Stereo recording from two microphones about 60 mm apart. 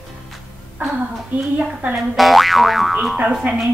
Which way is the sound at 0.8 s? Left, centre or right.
Right.